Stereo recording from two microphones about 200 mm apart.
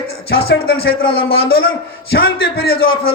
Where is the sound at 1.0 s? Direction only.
30° left (ahead or behind).